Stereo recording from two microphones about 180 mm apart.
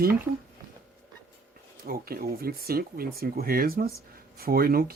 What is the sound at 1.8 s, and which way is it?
Speech, 55° right (ahead or behind).